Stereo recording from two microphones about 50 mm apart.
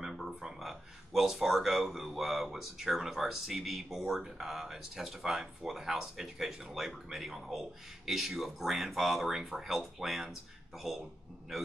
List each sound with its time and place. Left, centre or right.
0.0 s a man's voice: centre